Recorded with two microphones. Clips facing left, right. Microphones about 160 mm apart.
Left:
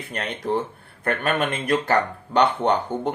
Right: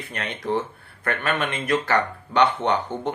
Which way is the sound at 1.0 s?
40° left (ahead or behind).